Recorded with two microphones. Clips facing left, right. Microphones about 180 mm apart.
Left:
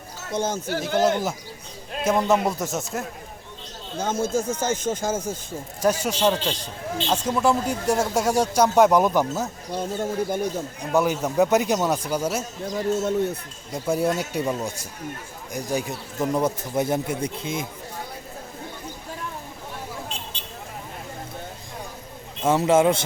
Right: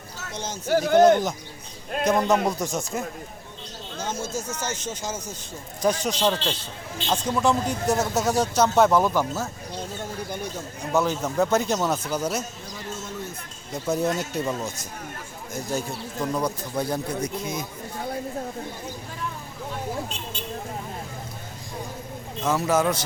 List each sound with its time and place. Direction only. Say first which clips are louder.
0.3 s speech: left 9 dB; 55° left (ahead or behind)
0.9 s speech: right 4 dB; 5° left (ahead or behind)
3.9 s speech: left 6 dB; 55° left (ahead or behind)
5.8 s speech: left 2 dB; 10° left (ahead or behind)
9.7 s speech: left 9 dB; 50° left (ahead or behind)
10.9 s speech: left 2 dB; 10° left (ahead or behind)
12.6 s speech: left 12 dB; 50° left (ahead or behind)
13.7 s speech: left 2 dB; 10° left (ahead or behind); by 17.7 s 25° left (ahead or behind)
22.4 s speech: left 4 dB; 25° left (ahead or behind)